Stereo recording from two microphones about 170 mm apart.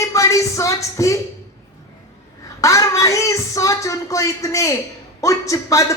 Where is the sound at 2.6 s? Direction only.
20° left (ahead or behind).